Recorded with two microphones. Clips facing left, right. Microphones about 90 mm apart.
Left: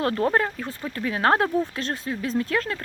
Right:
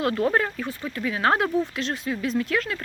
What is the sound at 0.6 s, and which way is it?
Speech, 40° left (ahead or behind).